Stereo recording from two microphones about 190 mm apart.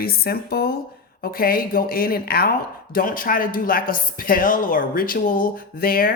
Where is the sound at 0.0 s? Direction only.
55° left (ahead or behind).